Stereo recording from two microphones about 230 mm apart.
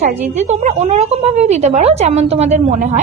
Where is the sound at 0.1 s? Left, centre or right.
Right.